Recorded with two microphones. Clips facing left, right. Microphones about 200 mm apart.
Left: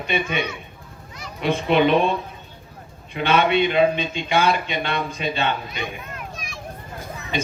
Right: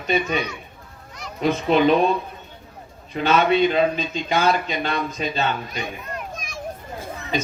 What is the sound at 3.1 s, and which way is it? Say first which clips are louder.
Speech: right 1 dB; 40° right (ahead or behind).